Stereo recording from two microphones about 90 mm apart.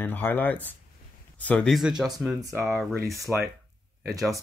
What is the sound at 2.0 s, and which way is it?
Speech, 5° right (ahead or behind).